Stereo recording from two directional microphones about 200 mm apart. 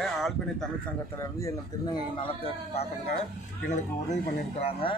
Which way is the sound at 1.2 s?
15° left (ahead or behind).